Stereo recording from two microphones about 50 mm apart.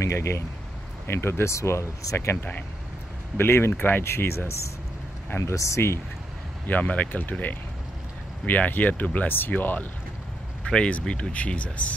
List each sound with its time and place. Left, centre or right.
0.0 s speech: left
1.0 s speech: left
3.3 s speech: left
5.4 s speech: left
6.7 s speech: left
8.5 s speech: left
10.7 s speech: left